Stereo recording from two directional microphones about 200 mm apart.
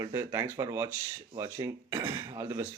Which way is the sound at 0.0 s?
15° right (ahead or behind).